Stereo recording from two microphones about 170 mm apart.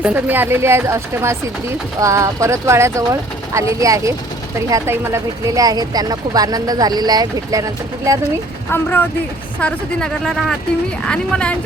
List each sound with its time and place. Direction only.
0.0 s speech: 10° right (ahead or behind)
8.7 s speech: 10° left (ahead or behind)